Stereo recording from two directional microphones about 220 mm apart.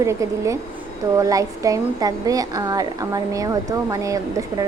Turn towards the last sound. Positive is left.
turn(degrees=-15)  # may be behind; listen again after turning